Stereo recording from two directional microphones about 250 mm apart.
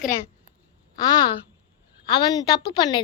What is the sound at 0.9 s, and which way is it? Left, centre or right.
A woman's voice, centre.